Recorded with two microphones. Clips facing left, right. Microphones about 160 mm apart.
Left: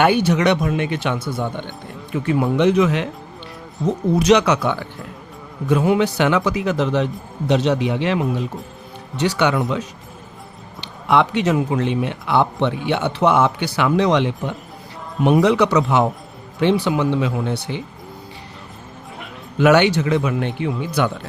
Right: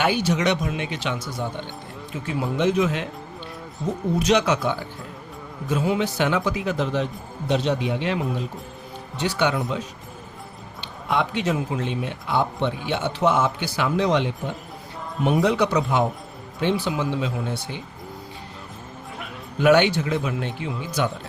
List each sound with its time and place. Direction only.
0.0 s a man's voice: 60° left (ahead or behind); by 3.1 s 75° left (ahead or behind)
4.1 s a man's voice: 75° left (ahead or behind)
16.6 s a man's voice: 70° left (ahead or behind)
19.5 s a man's voice: 90° left; by 21.1 s 65° left (ahead or behind)